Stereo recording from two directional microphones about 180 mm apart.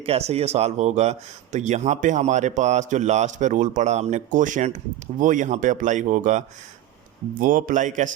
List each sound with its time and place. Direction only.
0.0 s speech: 35° right (ahead or behind)